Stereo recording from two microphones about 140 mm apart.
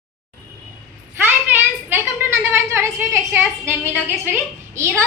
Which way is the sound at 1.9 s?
20° right (ahead or behind).